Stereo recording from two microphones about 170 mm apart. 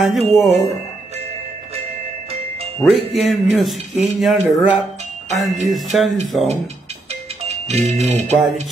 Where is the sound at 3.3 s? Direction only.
Centre (ahead or behind).